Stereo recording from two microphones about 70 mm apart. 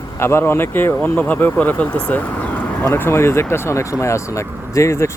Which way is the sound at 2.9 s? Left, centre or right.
Left.